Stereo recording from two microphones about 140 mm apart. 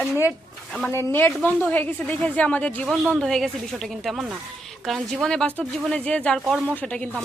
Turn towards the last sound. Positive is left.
turn(degrees=10)  # may be behind; listen again after turning